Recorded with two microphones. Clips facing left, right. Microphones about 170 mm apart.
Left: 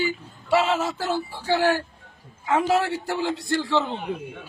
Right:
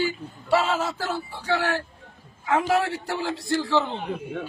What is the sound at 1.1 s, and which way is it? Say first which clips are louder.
Speech: left 4 dB; 30° left (ahead or behind).